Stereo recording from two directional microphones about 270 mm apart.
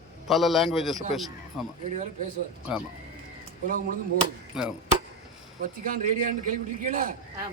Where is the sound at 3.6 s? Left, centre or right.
Right.